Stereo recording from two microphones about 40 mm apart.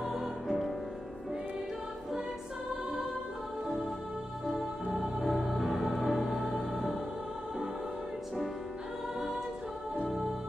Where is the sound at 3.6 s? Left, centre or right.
Centre.